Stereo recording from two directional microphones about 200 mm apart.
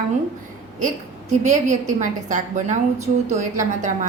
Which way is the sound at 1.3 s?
35° right (ahead or behind).